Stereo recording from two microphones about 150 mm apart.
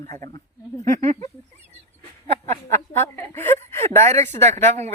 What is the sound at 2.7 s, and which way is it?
A woman's voice, 15° left (ahead or behind).